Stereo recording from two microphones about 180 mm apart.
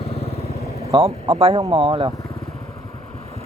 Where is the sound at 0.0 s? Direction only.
35° left (ahead or behind).